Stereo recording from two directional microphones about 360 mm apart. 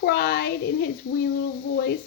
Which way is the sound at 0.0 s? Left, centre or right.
Left.